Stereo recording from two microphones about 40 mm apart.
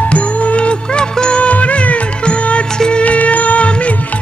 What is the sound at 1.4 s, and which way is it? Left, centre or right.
Music, left.